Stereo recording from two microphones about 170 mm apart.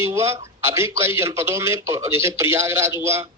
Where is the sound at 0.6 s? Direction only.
15° right (ahead or behind).